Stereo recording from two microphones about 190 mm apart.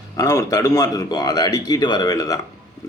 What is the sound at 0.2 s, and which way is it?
A man's voice, 15° left (ahead or behind).